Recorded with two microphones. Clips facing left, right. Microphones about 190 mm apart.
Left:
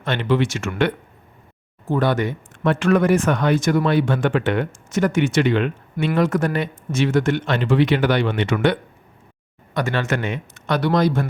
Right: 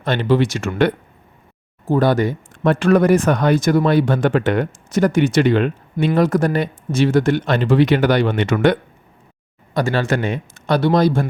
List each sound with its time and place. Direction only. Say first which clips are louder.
0.0 s speech: right 3 dB; 35° right (ahead or behind)